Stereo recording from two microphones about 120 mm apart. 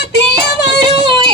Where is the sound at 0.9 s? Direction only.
40° right (ahead or behind).